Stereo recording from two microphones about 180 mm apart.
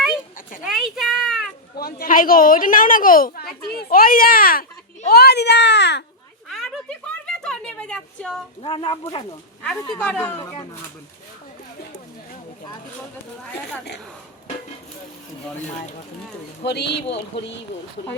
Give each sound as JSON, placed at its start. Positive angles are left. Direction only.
{"t": 0.6, "sound": "a sound", "side_deg": 0}
{"t": 1.7, "sound": "a child's voice", "side_deg": 55}
{"t": 6.5, "sound": "a sound", "side_deg": 0}
{"t": 8.6, "sound": "speech", "side_deg": 30}
{"t": 9.9, "sound": "speech", "side_deg": 5}
{"t": 16.6, "sound": "a child's voice", "side_deg": 70}